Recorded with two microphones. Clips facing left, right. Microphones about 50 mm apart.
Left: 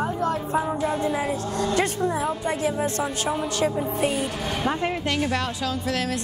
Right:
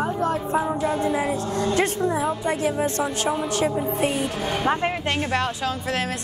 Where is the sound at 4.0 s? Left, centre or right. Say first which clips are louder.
Left 1 dB; right.